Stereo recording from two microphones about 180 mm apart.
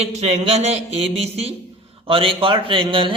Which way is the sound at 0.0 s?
35° right (ahead or behind).